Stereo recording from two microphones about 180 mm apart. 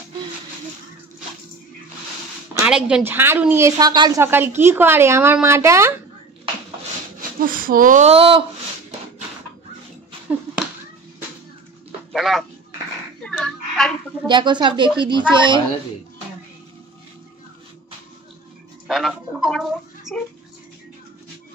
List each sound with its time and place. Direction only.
2.5 s speech: 10° right (ahead or behind)
4.2 s speech: 10° right (ahead or behind)
7.2 s speech: 50° right (ahead or behind); by 8.5 s 30° right (ahead or behind)
12.1 s a sound: centre (ahead or behind)
14.2 s speech: 25° right (ahead or behind)
18.9 s music: centre (ahead or behind)
20.1 s bathtub: 5° right (ahead or behind)